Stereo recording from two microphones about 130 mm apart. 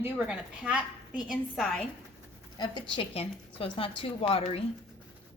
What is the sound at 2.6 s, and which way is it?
Speech, 35° left (ahead or behind).